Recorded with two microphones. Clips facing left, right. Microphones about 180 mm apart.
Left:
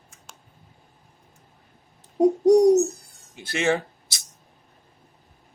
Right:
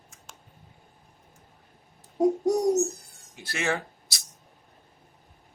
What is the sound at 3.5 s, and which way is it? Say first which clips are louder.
Speech: left 6 dB; 20° left (ahead or behind).